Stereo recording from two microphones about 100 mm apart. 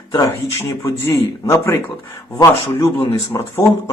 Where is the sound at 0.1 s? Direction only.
40° left (ahead or behind).